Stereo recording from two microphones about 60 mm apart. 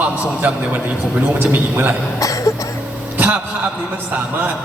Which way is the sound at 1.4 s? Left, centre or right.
Right.